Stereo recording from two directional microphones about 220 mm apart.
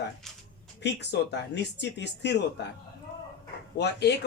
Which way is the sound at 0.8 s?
50° left (ahead or behind).